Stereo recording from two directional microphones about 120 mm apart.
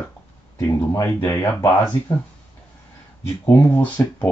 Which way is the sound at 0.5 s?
25° left (ahead or behind).